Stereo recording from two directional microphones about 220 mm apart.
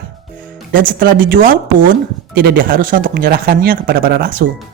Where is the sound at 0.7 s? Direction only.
40° right (ahead or behind).